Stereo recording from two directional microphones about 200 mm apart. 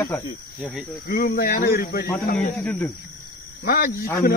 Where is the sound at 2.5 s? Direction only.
5° left (ahead or behind).